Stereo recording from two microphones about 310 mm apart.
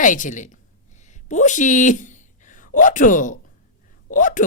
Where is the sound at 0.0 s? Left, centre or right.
Left.